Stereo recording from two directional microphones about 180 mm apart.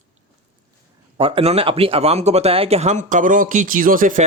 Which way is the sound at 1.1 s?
30° right (ahead or behind).